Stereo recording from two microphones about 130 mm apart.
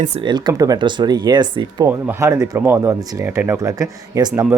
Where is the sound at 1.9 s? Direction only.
20° right (ahead or behind).